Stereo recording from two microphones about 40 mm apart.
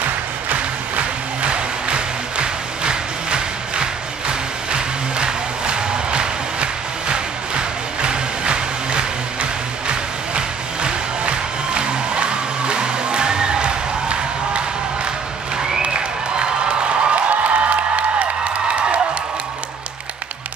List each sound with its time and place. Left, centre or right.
0.5 s music: right
15.5 s applause: centre
17.3 s music: right